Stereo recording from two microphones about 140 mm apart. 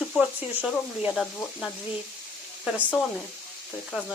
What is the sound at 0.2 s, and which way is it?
Speech, 10° right (ahead or behind).